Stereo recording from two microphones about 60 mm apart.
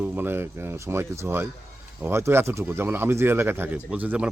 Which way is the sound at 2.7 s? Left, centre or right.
Right.